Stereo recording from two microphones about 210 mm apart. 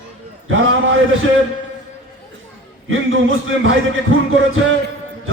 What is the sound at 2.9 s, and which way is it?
Speech, 65° right (ahead or behind).